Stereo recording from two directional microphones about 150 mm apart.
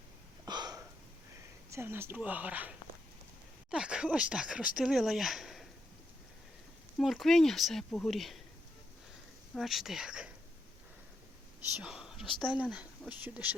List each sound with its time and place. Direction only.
0.4 s hiccup: 30° right (ahead or behind)
1.7 s speech: 15° right (ahead or behind); by 5.6 s centre (ahead or behind)
7.0 s speech: centre (ahead or behind)
9.6 s speech: centre (ahead or behind)
11.8 s speech: 5° right (ahead or behind)